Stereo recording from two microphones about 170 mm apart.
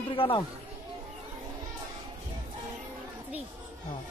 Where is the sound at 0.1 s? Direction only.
30° left (ahead or behind).